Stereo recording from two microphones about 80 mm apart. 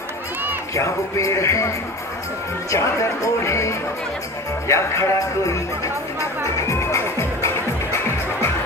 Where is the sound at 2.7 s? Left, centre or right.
Left.